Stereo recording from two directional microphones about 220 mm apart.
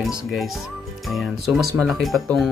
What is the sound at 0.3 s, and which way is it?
Speech, centre (ahead or behind).